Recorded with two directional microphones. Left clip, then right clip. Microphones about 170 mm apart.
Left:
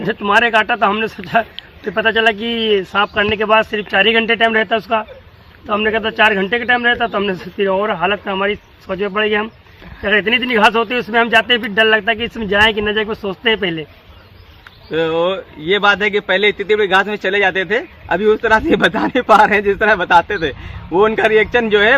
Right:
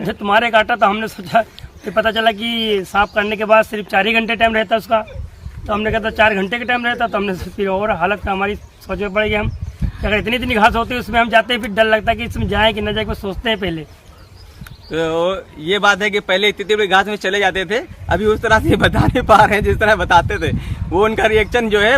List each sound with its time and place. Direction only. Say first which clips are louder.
0.0 s speech: left 2 dB; 35° right (ahead or behind)
14.8 s speech: left 1 dB; 15° right (ahead or behind)